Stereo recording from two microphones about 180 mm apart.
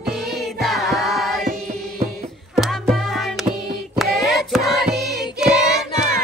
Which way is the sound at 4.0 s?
Centre (ahead or behind).